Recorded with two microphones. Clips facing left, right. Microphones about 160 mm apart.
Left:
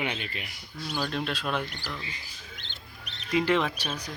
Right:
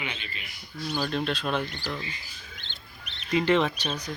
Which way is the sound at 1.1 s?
5° left (ahead or behind).